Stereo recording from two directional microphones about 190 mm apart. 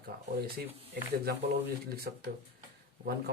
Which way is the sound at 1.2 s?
55° right (ahead or behind).